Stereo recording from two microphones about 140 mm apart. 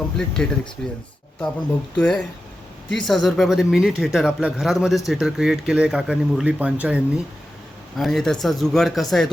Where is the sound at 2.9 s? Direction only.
Centre (ahead or behind).